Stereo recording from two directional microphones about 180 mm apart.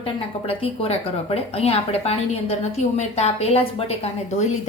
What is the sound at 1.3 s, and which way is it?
A woman's voice, 35° left (ahead or behind).